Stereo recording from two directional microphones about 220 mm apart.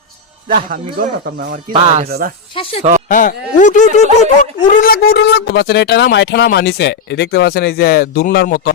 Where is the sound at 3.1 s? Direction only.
35° left (ahead or behind).